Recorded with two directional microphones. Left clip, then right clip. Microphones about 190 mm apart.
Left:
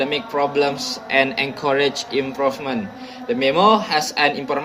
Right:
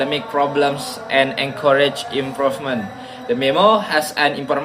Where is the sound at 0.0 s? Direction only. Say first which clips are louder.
Right 2 dB; 30° left (ahead or behind).